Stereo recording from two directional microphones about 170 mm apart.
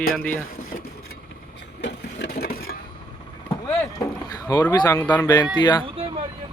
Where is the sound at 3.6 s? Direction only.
20° left (ahead or behind).